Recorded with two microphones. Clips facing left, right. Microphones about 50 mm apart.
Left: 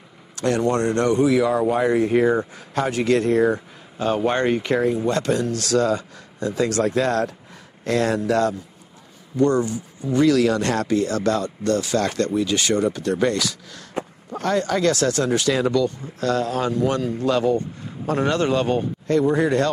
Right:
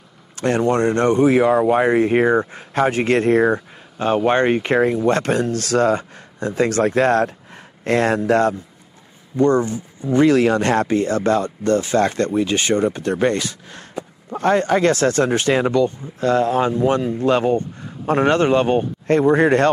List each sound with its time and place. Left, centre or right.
0.4 s speech: right